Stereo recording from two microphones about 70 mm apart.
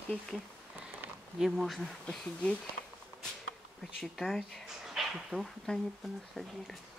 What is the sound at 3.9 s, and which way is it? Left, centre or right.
Speech, centre.